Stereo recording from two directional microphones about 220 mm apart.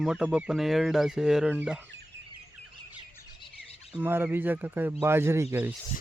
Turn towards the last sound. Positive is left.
turn(degrees=-10)  # may be behind; listen again after turning